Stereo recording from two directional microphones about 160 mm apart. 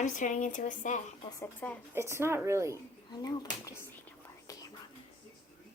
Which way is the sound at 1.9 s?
15° right (ahead or behind).